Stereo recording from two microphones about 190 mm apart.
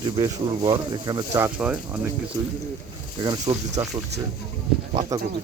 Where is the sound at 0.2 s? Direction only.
20° right (ahead or behind).